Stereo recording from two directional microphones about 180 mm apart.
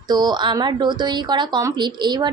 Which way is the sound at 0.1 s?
25° right (ahead or behind).